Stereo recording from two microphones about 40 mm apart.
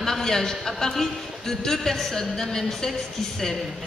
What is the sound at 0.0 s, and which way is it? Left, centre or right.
A man's voice, centre.